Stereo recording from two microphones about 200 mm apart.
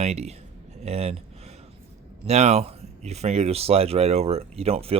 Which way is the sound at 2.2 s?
35° right (ahead or behind).